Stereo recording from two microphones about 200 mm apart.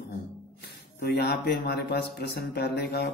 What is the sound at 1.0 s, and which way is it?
Speech, 55° left (ahead or behind).